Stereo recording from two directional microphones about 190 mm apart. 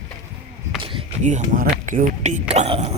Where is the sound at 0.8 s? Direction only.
25° right (ahead or behind).